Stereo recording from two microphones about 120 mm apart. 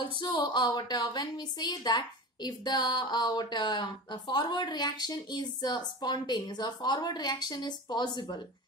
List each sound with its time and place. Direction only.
0.2 s a woman's voice: 40° left (ahead or behind)